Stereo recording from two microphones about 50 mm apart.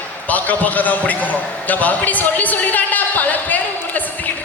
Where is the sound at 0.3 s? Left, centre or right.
Left.